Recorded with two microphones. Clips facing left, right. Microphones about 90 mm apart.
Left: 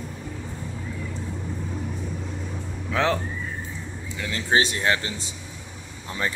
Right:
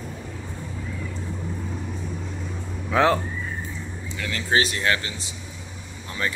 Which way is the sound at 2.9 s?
10° right (ahead or behind).